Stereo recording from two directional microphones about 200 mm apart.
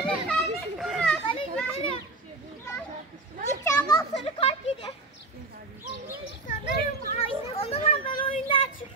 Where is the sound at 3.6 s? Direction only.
15° left (ahead or behind).